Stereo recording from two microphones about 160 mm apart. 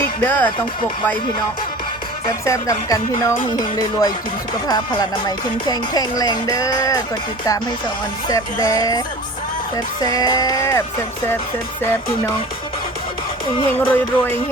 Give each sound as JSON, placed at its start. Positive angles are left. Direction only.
{"t": 0.3, "sound": "music", "side_deg": 10}
{"t": 2.4, "sound": "speech", "side_deg": 20}
{"t": 8.3, "sound": "speech", "side_deg": 20}
{"t": 11.8, "sound": "music", "side_deg": 15}
{"t": 13.7, "sound": "music", "side_deg": 10}